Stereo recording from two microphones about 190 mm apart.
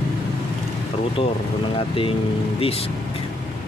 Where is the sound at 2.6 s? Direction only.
30° left (ahead or behind).